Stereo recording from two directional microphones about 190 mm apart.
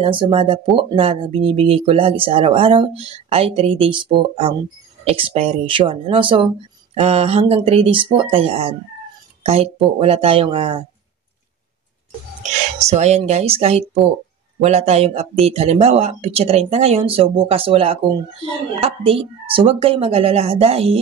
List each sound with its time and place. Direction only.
0.0 s speech: 30° right (ahead or behind)
12.8 s speech: 35° right (ahead or behind)